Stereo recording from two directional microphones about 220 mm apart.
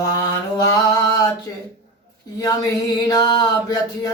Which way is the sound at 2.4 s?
15° left (ahead or behind).